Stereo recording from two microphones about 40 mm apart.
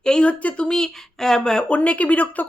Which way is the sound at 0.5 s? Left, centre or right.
Left.